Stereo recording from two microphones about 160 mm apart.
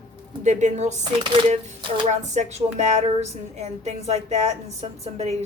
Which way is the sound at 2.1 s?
45° right (ahead or behind).